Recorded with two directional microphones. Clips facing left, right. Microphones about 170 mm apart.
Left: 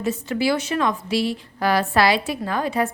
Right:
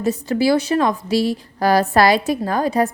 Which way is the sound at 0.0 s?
40° right (ahead or behind).